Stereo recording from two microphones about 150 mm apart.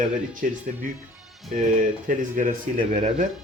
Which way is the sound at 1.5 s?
60° right (ahead or behind).